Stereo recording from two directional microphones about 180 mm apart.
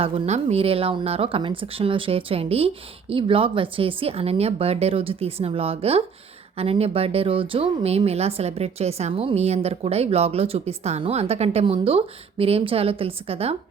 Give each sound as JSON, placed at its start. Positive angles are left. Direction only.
{"t": 0.0, "sound": "speech", "side_deg": -35}